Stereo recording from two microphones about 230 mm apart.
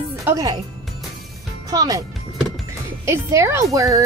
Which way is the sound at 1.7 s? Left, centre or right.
Centre.